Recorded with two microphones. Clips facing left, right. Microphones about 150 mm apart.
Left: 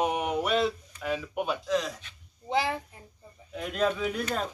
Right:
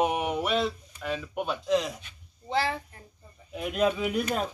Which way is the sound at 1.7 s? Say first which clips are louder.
Right 5 dB; 20° right (ahead or behind).